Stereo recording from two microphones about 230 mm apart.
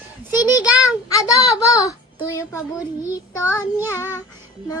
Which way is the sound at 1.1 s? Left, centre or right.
Centre.